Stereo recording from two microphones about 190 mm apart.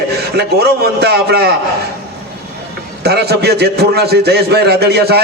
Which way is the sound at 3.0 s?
55° right (ahead or behind).